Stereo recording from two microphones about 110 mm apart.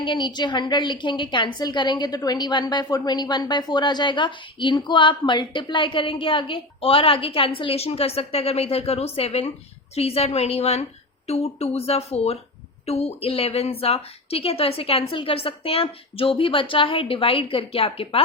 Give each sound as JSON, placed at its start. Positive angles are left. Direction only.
{"t": 0.0, "sound": "a woman's voice", "side_deg": 45}